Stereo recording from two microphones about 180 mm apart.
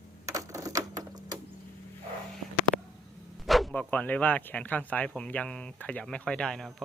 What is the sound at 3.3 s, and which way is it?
Speech, centre (ahead or behind).